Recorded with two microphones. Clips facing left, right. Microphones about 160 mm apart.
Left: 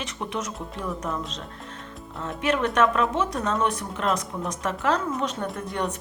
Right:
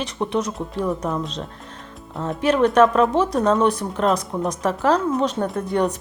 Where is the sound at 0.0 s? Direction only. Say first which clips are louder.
Right 8 dB; 35° right (ahead or behind).